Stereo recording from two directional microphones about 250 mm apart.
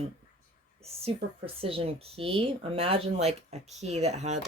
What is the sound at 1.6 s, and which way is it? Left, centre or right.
Speech, right.